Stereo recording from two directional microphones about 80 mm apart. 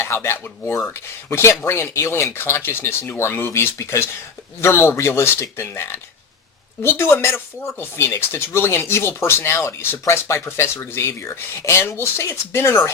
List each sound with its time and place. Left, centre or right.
0.0 s speech: left